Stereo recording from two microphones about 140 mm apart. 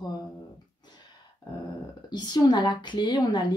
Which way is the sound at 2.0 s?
30° left (ahead or behind).